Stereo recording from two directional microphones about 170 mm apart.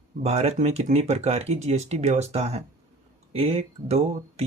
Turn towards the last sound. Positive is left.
turn(degrees=-40)  # may be behind; listen again after turning